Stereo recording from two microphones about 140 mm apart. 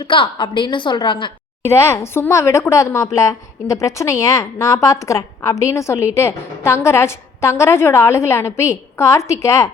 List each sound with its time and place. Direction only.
0.0 s a woman's voice: 35° left (ahead or behind)
1.9 s a woman's voice: 20° left (ahead or behind)